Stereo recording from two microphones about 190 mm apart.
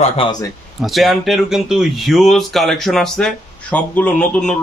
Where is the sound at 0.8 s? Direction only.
Centre (ahead or behind).